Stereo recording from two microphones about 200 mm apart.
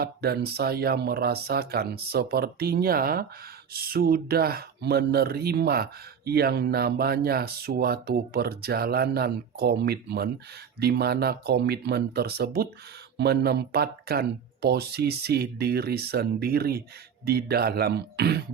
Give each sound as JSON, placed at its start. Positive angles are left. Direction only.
{"t": 0.0, "sound": "speech", "side_deg": -50}